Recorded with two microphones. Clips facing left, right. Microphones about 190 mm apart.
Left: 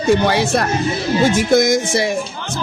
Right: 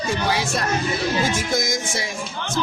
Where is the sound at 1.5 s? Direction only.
65° left (ahead or behind).